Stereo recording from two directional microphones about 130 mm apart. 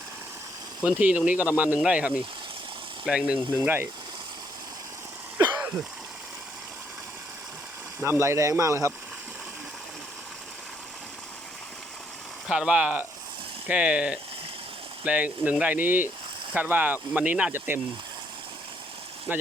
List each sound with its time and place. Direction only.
0.9 s speech: 10° right (ahead or behind)
5.4 s a sound: 10° right (ahead or behind)
8.0 s speech: 20° right (ahead or behind)
12.5 s speech: 5° right (ahead or behind)
19.3 s speech: 15° right (ahead or behind)